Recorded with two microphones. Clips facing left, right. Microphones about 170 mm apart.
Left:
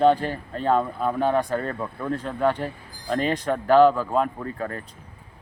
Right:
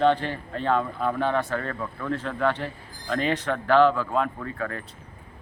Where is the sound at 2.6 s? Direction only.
40° left (ahead or behind).